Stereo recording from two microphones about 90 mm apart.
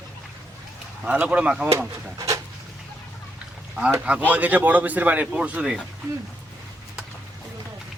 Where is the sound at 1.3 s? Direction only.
10° right (ahead or behind).